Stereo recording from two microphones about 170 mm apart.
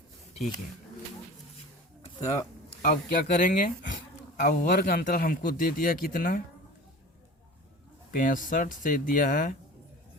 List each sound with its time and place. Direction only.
2.2 s speech: 15° left (ahead or behind)
2.6 s speech: 60° left (ahead or behind)
8.1 s speech: 55° left (ahead or behind)